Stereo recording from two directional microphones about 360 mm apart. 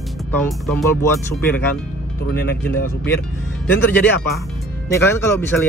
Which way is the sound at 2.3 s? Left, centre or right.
Left.